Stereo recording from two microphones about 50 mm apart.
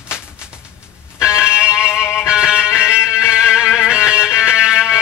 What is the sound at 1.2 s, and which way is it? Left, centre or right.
Music, centre.